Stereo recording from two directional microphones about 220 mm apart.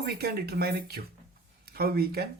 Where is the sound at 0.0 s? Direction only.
45° right (ahead or behind).